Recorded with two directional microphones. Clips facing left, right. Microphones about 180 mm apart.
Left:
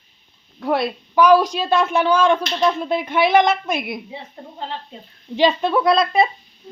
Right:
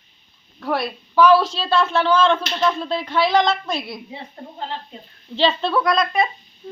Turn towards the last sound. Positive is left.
turn(degrees=30)  # may be behind; listen again after turning